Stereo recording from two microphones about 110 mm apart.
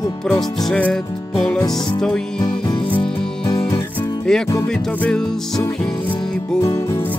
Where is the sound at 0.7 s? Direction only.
10° left (ahead or behind).